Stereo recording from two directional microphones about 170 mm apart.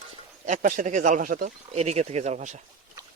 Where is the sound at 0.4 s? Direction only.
50° right (ahead or behind).